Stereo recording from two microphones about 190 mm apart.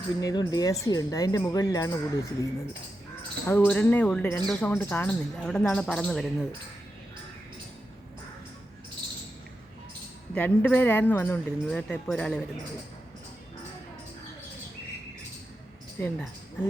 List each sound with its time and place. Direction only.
0.2 s speech: 20° left (ahead or behind); by 6.2 s 5° left (ahead or behind)
10.3 s speech: 10° left (ahead or behind)
16.0 s speech: 10° left (ahead or behind)